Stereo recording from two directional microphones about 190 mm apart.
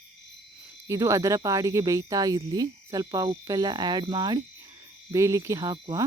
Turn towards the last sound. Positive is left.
turn(degrees=-20)  # may be behind; listen again after turning